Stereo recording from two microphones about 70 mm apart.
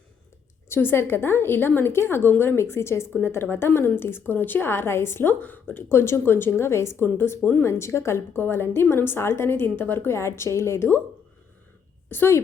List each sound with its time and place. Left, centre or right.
0.7 s a woman's voice: left
5.9 s a woman's voice: left
12.0 s speech: left